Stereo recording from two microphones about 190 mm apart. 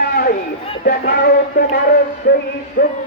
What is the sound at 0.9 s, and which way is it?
Speech, 55° left (ahead or behind).